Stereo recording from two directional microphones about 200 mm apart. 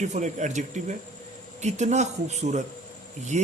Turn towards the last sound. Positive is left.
turn(degrees=-40)  # may be behind; listen again after turning